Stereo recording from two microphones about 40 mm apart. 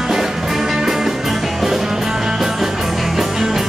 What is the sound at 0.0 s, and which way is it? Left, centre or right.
Music, centre.